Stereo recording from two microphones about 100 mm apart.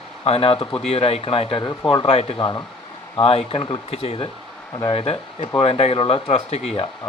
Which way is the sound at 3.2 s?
75° left (ahead or behind).